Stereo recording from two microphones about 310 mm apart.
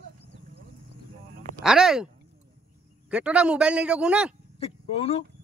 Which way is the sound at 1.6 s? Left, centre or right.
Centre.